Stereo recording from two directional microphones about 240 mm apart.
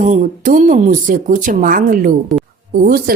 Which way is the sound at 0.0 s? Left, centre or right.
Right.